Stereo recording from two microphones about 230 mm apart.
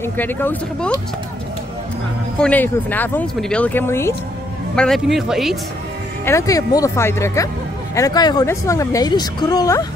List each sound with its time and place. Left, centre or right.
0.0 s speech: centre
2.3 s speech: centre
6.2 s speech: centre